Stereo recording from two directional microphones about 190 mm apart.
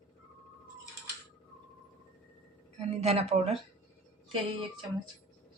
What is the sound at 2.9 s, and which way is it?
Speech, 35° right (ahead or behind).